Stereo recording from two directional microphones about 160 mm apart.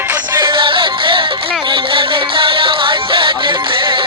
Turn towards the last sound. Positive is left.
turn(degrees=-30)  # may be behind; listen again after turning